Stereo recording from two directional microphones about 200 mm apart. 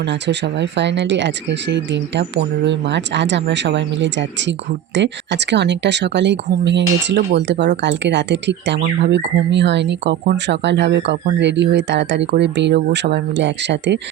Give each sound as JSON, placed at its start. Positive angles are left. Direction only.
{"t": 0.0, "sound": "speech", "side_deg": -60}